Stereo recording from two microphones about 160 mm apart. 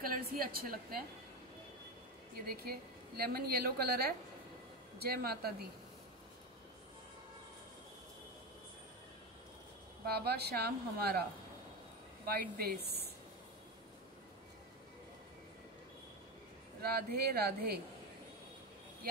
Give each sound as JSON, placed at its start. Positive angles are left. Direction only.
{"t": 0.0, "sound": "a woman's voice", "side_deg": -65}
{"t": 2.3, "sound": "a woman's voice", "side_deg": -70}
{"t": 10.0, "sound": "a woman's voice", "side_deg": -85}
{"t": 12.3, "sound": "a woman's voice", "side_deg": -70}
{"t": 16.8, "sound": "a woman's voice", "side_deg": -80}